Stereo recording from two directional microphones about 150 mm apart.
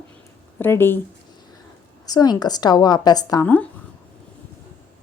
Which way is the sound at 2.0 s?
25° left (ahead or behind).